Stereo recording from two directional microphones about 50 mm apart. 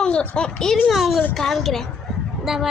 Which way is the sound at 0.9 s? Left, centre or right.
Centre.